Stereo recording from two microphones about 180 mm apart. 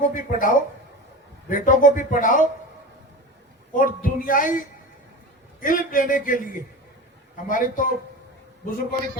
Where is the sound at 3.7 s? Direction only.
50° left (ahead or behind).